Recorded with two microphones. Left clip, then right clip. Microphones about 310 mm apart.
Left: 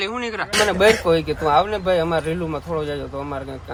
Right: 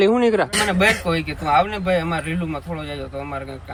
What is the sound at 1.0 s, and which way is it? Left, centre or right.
Speech, centre.